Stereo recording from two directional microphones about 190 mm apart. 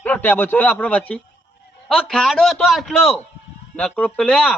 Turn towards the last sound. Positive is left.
turn(degrees=5)  # may be behind; listen again after turning